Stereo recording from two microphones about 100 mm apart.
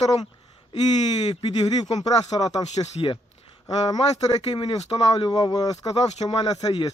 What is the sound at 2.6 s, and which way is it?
Speech, 70° left (ahead or behind).